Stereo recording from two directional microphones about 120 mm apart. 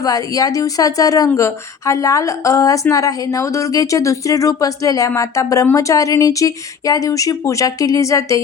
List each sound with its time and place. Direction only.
0.0 s a woman's voice: 30° left (ahead or behind)